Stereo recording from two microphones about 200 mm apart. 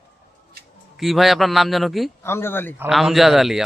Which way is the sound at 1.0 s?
Centre (ahead or behind).